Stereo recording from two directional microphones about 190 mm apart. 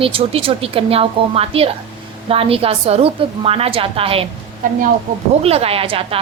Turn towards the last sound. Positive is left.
turn(degrees=-30)  # may be behind; listen again after turning